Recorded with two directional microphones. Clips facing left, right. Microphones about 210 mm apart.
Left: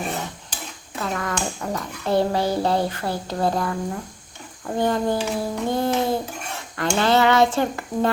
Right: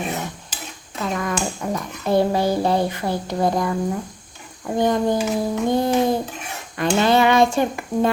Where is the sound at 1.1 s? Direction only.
15° right (ahead or behind).